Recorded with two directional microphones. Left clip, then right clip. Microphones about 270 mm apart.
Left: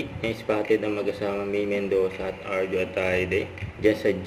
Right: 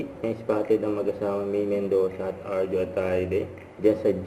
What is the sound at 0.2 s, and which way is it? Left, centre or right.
Speech, centre.